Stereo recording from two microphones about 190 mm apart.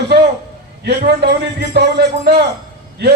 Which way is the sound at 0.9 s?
55° right (ahead or behind).